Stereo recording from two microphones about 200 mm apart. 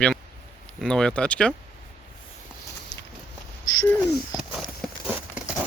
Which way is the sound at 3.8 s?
20° left (ahead or behind).